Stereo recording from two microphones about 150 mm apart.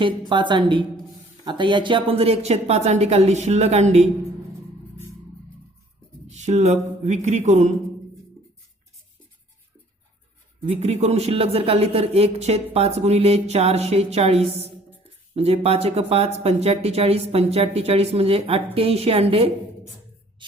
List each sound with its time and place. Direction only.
0.0 s a woman's voice: 30° right (ahead or behind); by 4.1 s 45° right (ahead or behind)
6.2 s speech: 50° right (ahead or behind)
10.7 s speech: 45° right (ahead or behind)